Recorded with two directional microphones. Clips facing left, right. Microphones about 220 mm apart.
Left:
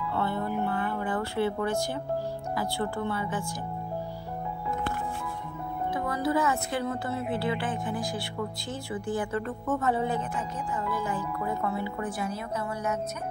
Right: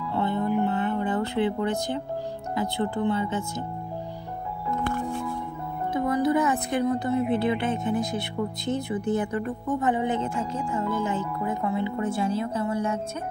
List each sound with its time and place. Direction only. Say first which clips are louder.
0.1 s music: right 6 dB; 20° right (ahead or behind)
2.5 s a woman's voice: right 5 dB; 20° right (ahead or behind)
5.9 s a woman's voice: right 5 dB; 20° right (ahead or behind)